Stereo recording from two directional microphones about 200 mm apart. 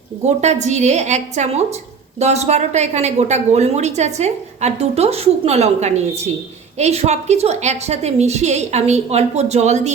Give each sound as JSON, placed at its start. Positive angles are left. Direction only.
{"t": 0.3, "sound": "a woman's voice", "side_deg": -35}